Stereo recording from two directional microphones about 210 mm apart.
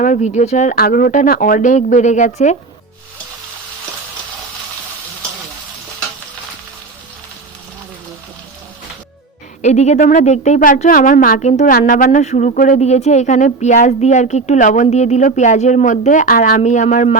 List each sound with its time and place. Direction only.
0.0 s speech: 35° left (ahead or behind)
9.6 s speech: 35° left (ahead or behind)